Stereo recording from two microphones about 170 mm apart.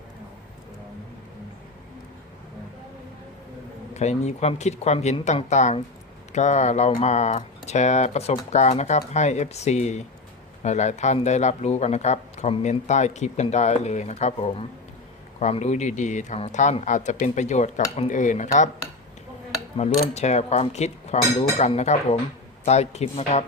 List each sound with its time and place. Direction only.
3.9 s speech: 40° left (ahead or behind)
19.7 s speech: 40° left (ahead or behind)